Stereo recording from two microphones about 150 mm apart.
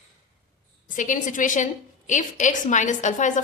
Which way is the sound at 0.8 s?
60° left (ahead or behind).